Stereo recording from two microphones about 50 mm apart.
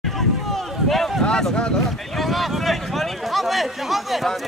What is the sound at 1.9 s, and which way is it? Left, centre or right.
Speech, centre.